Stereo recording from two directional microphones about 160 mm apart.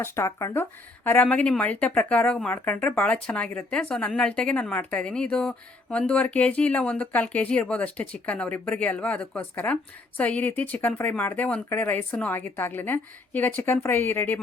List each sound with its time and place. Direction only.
0.0 s a woman's voice: 15° left (ahead or behind)